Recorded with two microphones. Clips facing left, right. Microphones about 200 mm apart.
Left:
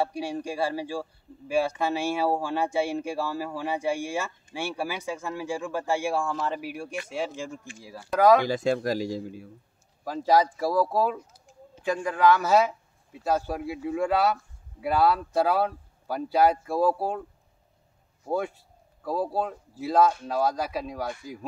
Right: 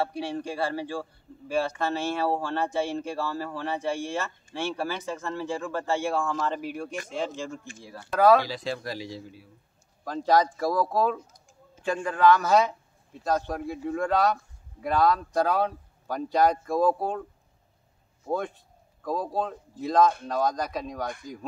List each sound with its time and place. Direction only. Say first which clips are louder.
0.0 s speech: left 1 dB; 10° left (ahead or behind)
8.5 s a man's voice: left 7 dB; 50° left (ahead or behind)
10.0 s speech: left 1 dB; 10° left (ahead or behind)
18.3 s speech: left 1 dB; 10° left (ahead or behind)